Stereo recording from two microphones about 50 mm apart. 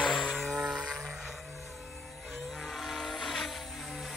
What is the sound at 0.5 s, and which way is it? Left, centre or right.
Vehicle, centre.